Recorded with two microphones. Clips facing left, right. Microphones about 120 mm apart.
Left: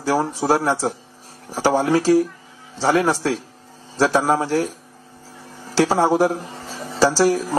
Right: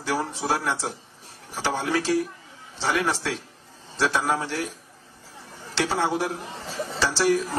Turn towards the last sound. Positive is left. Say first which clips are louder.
# left 6 dB
turn(degrees=40)  # may be behind; listen again after turning